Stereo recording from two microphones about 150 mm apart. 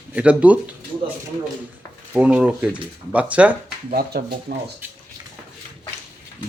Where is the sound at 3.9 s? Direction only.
90° right.